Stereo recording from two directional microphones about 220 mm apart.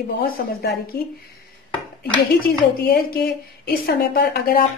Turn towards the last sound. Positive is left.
turn(degrees=45)  # may be behind; listen again after turning